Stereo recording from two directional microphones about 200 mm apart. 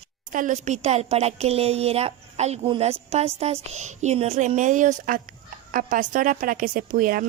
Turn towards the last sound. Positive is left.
turn(degrees=-45)  # may be behind; listen again after turning